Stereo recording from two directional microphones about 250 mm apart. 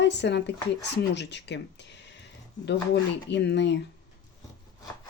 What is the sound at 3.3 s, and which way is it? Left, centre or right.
Speech, left.